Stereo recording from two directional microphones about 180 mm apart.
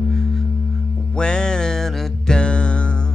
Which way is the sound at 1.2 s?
5° left (ahead or behind).